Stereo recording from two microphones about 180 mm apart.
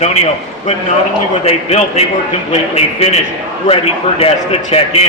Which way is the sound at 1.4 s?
35° left (ahead or behind).